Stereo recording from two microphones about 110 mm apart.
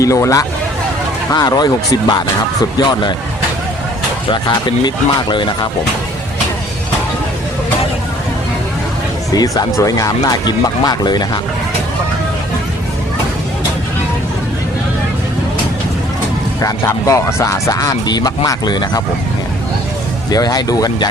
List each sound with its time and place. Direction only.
0.0 s speech: 30° left (ahead or behind)
4.3 s speech: 45° left (ahead or behind)
9.3 s speech: 35° left (ahead or behind)
16.6 s speech: 30° left (ahead or behind)
20.3 s speech: 35° left (ahead or behind)